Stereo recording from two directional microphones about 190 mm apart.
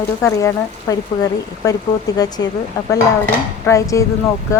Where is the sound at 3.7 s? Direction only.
15° left (ahead or behind).